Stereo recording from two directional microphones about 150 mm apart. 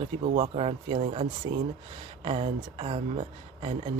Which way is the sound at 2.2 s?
40° right (ahead or behind).